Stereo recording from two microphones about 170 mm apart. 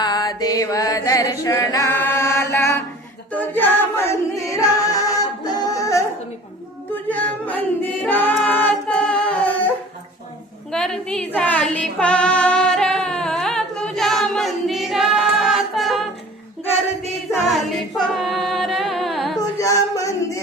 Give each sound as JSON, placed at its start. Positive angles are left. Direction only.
{"t": 0.0, "sound": "music", "side_deg": 20}
{"t": 3.3, "sound": "singing", "side_deg": 10}
{"t": 7.1, "sound": "singing", "side_deg": 10}
{"t": 10.7, "sound": "female singing", "side_deg": 5}
{"t": 17.5, "sound": "singing", "side_deg": 0}
{"t": 19.4, "sound": "singing", "side_deg": 20}